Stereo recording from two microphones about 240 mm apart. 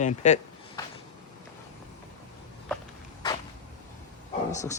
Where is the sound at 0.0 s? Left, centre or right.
Left.